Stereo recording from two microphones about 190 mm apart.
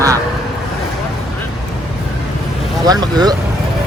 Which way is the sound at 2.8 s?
20° right (ahead or behind).